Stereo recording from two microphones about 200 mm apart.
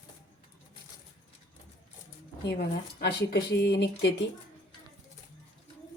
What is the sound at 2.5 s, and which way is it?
Speech, 55° left (ahead or behind).